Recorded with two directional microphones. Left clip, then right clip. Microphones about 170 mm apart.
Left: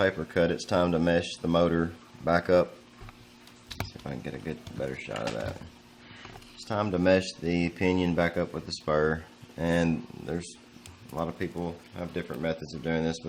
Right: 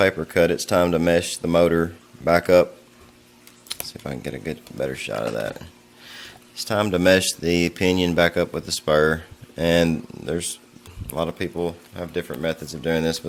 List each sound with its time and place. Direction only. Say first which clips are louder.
0.0 s speech: right 7 dB; 35° right (ahead or behind)
3.7 s speech: right 6 dB; 35° right (ahead or behind)
6.7 s speech: right 7 dB; 40° right (ahead or behind)